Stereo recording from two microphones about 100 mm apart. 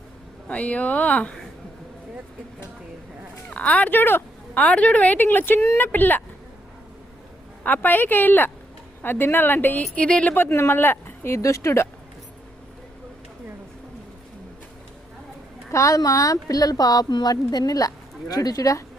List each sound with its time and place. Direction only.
0.4 s a woman's voice: 15° left (ahead or behind)
3.5 s a woman's voice: 15° left (ahead or behind)
7.6 s speech: 20° left (ahead or behind)
15.7 s speech: 35° left (ahead or behind)